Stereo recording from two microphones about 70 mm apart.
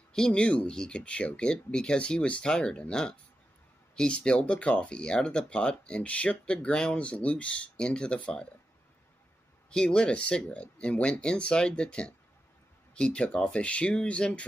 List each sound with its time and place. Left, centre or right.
0.1 s speech: centre
9.7 s speech: centre